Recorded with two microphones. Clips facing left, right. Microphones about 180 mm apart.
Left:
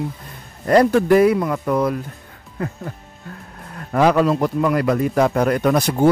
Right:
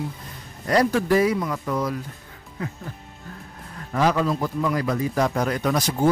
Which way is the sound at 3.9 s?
60° left (ahead or behind).